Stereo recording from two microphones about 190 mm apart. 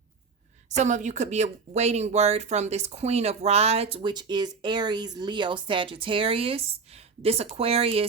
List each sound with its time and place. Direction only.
0.8 s speech: 40° right (ahead or behind)